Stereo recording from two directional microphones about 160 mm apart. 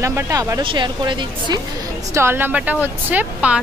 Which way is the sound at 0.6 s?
30° right (ahead or behind).